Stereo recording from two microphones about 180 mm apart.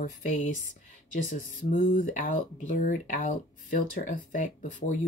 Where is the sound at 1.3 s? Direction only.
45° left (ahead or behind).